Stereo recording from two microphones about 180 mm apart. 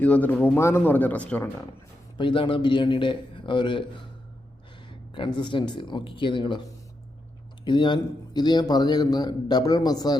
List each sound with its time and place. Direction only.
0.0 s speech: 10° left (ahead or behind)
2.1 s a man's voice: 25° left (ahead or behind)
5.1 s a man's voice: 25° left (ahead or behind)
7.6 s a man's voice: 25° left (ahead or behind)